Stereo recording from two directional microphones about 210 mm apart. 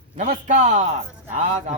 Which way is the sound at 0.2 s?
35° right (ahead or behind).